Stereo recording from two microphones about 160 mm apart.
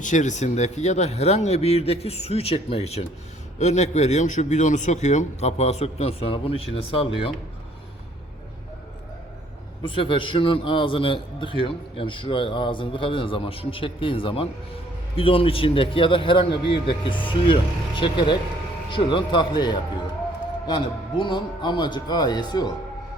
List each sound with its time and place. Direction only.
0.0 s speech: 50° left (ahead or behind); by 7.3 s 35° left (ahead or behind)
9.8 s a man's voice: 30° left (ahead or behind)